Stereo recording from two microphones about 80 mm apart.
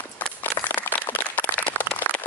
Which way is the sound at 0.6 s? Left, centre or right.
Left.